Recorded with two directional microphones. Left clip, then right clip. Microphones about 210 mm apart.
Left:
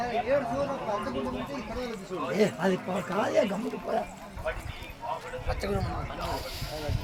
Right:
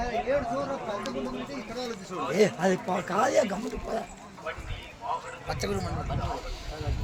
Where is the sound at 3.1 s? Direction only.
20° right (ahead or behind).